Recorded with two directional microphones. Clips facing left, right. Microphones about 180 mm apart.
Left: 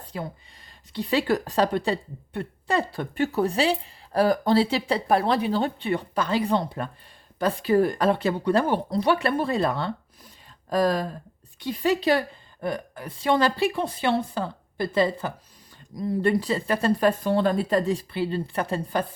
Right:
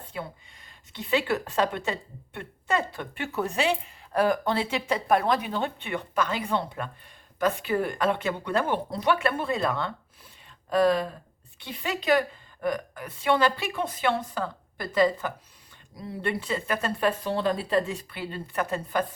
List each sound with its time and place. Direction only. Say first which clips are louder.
0.9 s a woman's voice: left 3 dB; 35° left (ahead or behind)
16.0 s a woman's voice: left 8 dB; 40° left (ahead or behind)
17.1 s a woman's voice: left 1 dB; 50° left (ahead or behind); by 19.0 s 30° left (ahead or behind)